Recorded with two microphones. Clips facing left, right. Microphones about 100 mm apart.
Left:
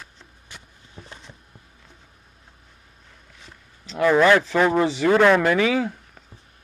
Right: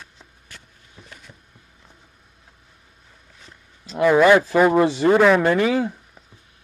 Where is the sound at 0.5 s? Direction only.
20° left (ahead or behind).